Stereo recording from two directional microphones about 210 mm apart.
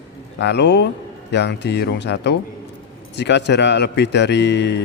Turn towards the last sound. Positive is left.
turn(degrees=55)  # may be behind; listen again after turning